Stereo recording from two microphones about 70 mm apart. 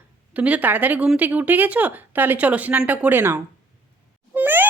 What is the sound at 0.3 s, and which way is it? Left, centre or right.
Speech, centre.